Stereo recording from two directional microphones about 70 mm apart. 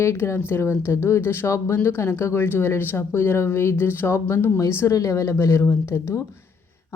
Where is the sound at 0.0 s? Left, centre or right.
Left.